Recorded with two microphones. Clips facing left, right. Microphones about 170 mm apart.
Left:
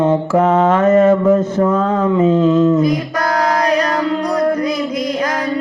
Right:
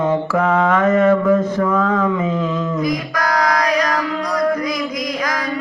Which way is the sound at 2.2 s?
30° left (ahead or behind).